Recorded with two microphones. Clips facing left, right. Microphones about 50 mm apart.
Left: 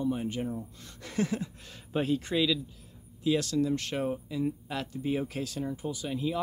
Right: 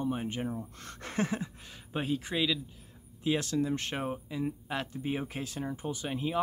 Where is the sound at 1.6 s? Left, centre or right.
Centre.